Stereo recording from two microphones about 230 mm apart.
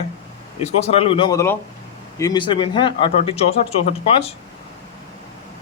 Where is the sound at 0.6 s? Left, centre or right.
Left.